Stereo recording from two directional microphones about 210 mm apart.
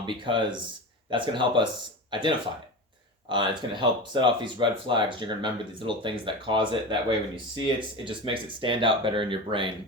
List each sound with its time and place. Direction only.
0.0 s speech: 20° right (ahead or behind)